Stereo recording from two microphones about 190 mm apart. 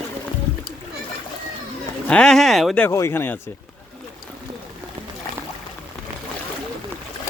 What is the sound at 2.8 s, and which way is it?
Speech, 15° left (ahead or behind).